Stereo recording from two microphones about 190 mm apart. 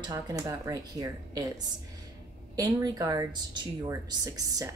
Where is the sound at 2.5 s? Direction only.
20° right (ahead or behind).